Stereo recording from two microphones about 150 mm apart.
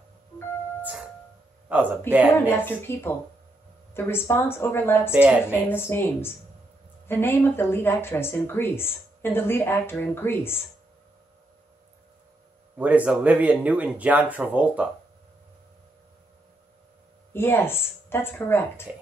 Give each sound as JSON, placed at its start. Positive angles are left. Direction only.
{"t": 1.7, "sound": "speech", "side_deg": -10}
{"t": 2.5, "sound": "speech", "side_deg": 15}
{"t": 5.1, "sound": "speech", "side_deg": -10}
{"t": 5.7, "sound": "speech", "side_deg": 15}
{"t": 12.7, "sound": "speech", "side_deg": -10}
{"t": 17.3, "sound": "speech", "side_deg": 15}